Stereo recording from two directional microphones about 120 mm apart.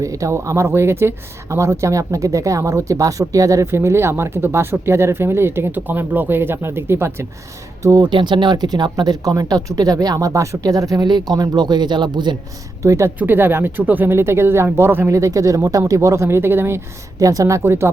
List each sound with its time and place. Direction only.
0.0 s speech: 25° right (ahead or behind)
8.0 s speech: 40° right (ahead or behind)
12.8 s speech: 25° right (ahead or behind)